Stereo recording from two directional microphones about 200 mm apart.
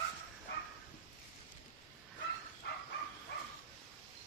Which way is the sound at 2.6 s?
55° left (ahead or behind).